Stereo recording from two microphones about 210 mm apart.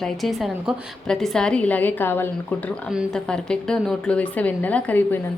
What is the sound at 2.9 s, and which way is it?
Speech, centre (ahead or behind).